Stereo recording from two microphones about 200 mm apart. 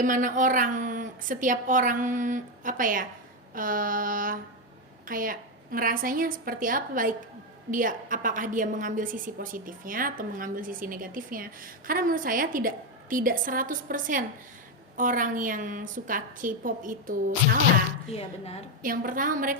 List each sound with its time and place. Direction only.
0.0 s a woman's voice: 40° right (ahead or behind)
18.1 s a woman's voice: 30° left (ahead or behind)
18.8 s a woman's voice: 45° right (ahead or behind)